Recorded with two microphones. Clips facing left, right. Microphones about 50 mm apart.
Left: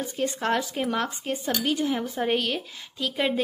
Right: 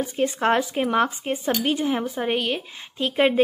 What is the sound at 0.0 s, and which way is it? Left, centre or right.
Speech, right.